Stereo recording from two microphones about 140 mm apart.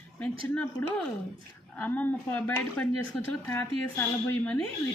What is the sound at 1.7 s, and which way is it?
A woman's voice, 10° left (ahead or behind).